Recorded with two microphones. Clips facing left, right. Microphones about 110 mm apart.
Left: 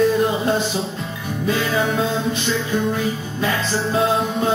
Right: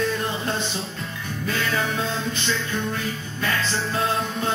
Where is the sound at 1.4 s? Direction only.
5° left (ahead or behind).